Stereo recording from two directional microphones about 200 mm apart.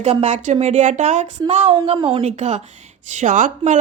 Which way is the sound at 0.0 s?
35° right (ahead or behind).